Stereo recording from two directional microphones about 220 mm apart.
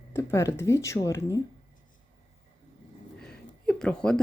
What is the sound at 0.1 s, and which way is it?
Speech, 10° left (ahead or behind).